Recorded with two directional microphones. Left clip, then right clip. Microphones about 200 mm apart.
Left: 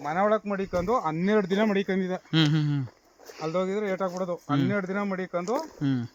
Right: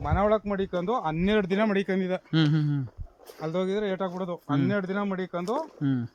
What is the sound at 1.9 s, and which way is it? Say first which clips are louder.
Speech: right 1 dB; 30° right (ahead or behind).